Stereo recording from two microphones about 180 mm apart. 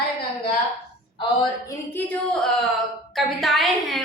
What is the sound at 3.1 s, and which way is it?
Speech, centre (ahead or behind).